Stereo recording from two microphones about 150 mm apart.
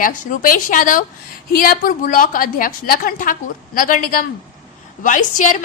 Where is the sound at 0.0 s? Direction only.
65° left (ahead or behind).